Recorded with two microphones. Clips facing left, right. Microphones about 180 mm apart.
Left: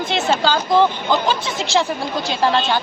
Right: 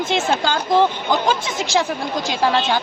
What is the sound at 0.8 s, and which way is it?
A woman's voice, 15° right (ahead or behind).